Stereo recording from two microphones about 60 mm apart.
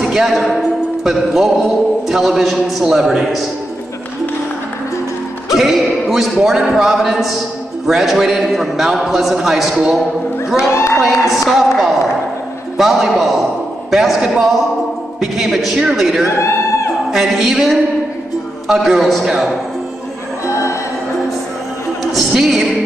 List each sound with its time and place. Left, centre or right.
0.0 s speech: centre
5.5 s speech: centre
11.0 s speech: centre
16.3 s a sound: left
17.1 s speech: centre
22.1 s music: centre